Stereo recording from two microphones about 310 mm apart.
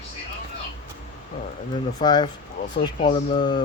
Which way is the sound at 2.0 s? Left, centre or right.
Centre.